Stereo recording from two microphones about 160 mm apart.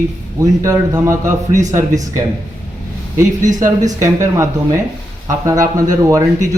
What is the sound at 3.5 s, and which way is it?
Speech, 50° right (ahead or behind).